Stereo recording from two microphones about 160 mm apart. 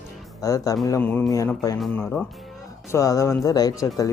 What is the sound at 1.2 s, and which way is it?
Speech, 20° left (ahead or behind).